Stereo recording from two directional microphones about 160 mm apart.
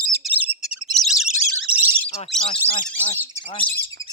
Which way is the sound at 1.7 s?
10° right (ahead or behind).